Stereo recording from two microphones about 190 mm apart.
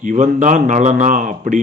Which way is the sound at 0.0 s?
40° right (ahead or behind).